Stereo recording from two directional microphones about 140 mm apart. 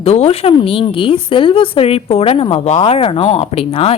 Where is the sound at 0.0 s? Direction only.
45° left (ahead or behind).